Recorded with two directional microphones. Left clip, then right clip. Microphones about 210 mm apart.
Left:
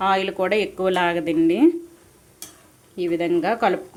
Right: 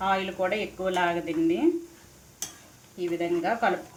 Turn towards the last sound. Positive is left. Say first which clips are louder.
# left 5 dB
turn(degrees=55)  # may be behind; listen again after turning